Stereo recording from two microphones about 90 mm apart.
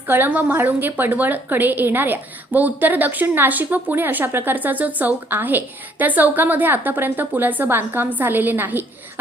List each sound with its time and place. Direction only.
0.1 s a woman's voice: 20° right (ahead or behind)